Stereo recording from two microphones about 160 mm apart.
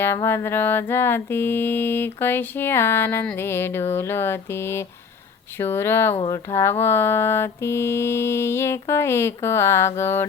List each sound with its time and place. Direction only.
0.0 s mantra: 15° left (ahead or behind)